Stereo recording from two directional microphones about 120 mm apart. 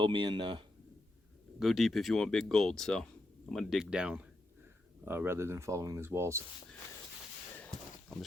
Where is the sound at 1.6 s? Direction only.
Centre (ahead or behind).